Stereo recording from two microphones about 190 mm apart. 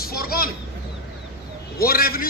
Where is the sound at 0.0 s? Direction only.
55° left (ahead or behind).